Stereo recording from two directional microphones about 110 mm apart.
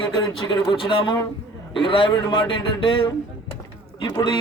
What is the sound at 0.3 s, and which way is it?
A man's voice, 40° left (ahead or behind).